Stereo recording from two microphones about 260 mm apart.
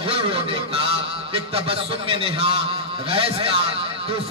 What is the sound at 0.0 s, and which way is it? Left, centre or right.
Honk, right.